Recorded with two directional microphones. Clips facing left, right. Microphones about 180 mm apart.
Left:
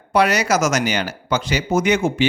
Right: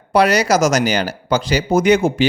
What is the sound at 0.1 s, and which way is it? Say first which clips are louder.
Speech: right 3 dB; 35° right (ahead or behind).